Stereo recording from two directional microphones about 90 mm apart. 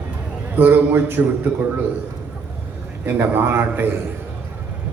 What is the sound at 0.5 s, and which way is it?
Speech, 20° right (ahead or behind).